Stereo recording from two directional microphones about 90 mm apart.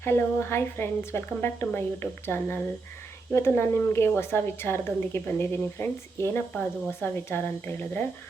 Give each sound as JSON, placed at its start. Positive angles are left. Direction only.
{"t": 0.0, "sound": "a woman's voice", "side_deg": 25}